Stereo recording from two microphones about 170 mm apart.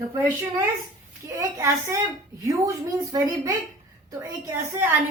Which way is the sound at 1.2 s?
15° right (ahead or behind).